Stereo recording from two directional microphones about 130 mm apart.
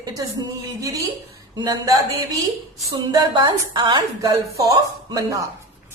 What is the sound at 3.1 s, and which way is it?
A woman's voice, 30° right (ahead or behind).